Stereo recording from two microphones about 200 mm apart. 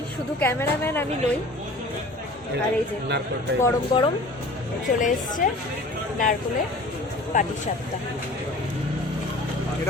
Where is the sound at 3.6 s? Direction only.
15° left (ahead or behind).